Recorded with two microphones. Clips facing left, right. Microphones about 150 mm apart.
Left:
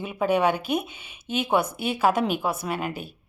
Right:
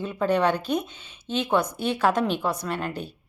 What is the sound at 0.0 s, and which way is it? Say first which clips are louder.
A woman's voice: even; 10° left (ahead or behind).